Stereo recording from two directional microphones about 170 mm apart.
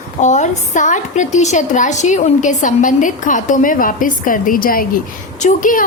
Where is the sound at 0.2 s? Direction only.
45° left (ahead or behind).